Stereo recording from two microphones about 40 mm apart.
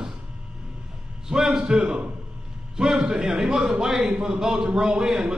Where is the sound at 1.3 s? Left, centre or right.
Centre.